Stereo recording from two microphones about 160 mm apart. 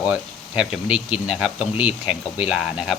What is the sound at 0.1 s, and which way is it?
Speech, 5° right (ahead or behind).